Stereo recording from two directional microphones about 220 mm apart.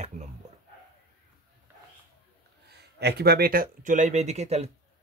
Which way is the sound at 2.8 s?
50° right (ahead or behind).